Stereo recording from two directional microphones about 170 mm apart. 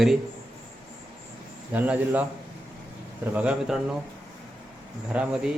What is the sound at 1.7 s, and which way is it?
Speech, 10° right (ahead or behind).